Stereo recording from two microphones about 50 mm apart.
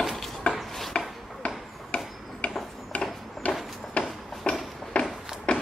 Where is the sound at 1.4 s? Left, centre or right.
Left.